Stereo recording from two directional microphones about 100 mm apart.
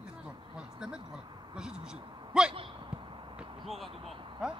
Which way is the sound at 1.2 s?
50° right (ahead or behind).